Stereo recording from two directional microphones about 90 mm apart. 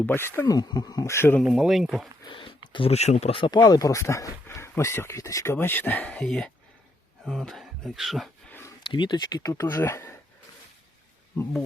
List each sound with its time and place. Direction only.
0.0 s speech: 25° left (ahead or behind)
0.4 s speech: 50° left (ahead or behind)
1.0 s speech: 30° left (ahead or behind)
1.5 s speech: 5° right (ahead or behind)
2.2 s speech: 70° left (ahead or behind); by 5.5 s 35° left (ahead or behind)
5.5 s speech: 20° left (ahead or behind)
6.1 s speech: 5° left (ahead or behind)
8.8 s speech: 60° left (ahead or behind); by 10.2 s 30° left (ahead or behind)